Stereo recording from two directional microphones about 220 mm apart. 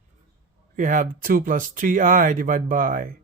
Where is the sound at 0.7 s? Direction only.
35° right (ahead or behind).